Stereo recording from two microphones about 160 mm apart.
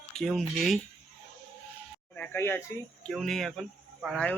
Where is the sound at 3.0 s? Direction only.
Centre (ahead or behind).